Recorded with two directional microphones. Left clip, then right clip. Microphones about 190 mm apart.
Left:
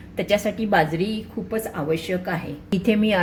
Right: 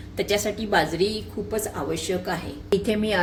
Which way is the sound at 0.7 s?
25° left (ahead or behind).